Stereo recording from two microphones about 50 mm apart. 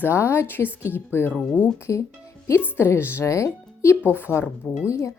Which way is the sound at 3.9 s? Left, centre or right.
Left.